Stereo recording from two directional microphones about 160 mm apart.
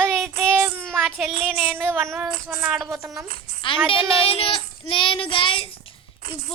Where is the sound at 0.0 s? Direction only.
Centre (ahead or behind).